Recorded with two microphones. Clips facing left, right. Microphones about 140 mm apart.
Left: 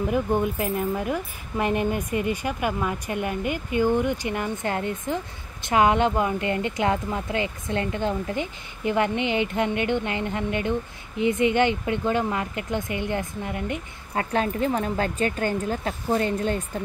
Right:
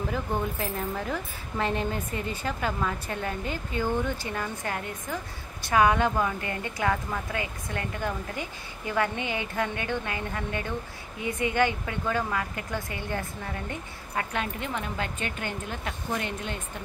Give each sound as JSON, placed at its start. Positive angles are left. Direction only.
{"t": 0.1, "sound": "speech", "side_deg": 15}
{"t": 14.1, "sound": "speech", "side_deg": 35}